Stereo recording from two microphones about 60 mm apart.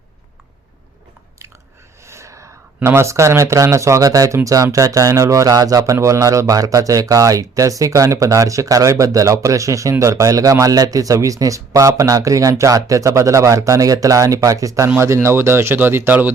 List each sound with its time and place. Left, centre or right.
2.0 s gasp: right
2.8 s speech: right
15.0 s speech: right